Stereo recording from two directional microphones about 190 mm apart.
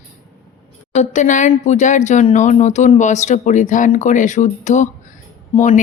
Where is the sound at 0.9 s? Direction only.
35° left (ahead or behind).